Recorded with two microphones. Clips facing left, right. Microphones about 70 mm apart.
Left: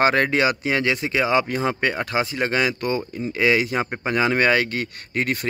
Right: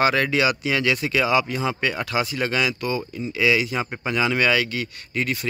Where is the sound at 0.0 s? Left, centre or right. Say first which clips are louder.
Left 1 dB; left.